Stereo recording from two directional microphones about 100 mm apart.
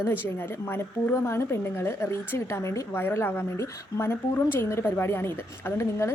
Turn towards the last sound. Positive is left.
turn(degrees=25)  # may be behind; listen again after turning